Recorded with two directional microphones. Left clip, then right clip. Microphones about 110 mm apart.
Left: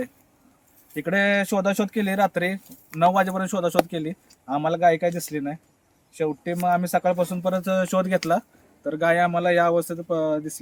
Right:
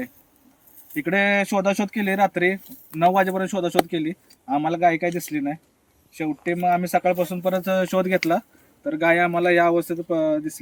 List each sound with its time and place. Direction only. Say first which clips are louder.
0.9 s speech: right 1 dB; 20° left (ahead or behind)